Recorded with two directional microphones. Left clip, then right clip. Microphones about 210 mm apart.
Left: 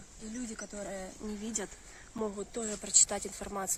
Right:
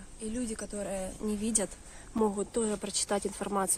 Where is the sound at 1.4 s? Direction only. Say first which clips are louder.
Right 6 dB; 35° right (ahead or behind).